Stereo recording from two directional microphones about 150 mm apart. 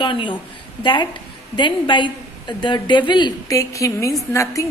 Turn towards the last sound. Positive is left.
turn(degrees=20)  # may be behind; listen again after turning